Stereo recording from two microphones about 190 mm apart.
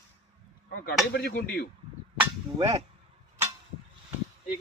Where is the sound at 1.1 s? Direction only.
55° left (ahead or behind).